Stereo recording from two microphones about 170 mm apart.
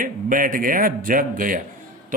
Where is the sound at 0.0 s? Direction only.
55° right (ahead or behind).